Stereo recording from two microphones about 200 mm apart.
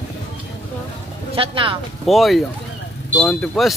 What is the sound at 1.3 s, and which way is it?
Speech, 25° right (ahead or behind).